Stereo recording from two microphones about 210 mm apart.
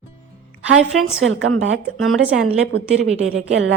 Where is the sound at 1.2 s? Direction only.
70° right (ahead or behind).